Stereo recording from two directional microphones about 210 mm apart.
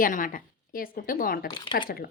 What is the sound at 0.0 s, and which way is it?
A woman's voice, 40° left (ahead or behind).